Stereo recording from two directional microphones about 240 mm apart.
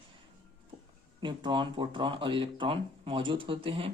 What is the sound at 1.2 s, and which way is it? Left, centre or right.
Speech, centre.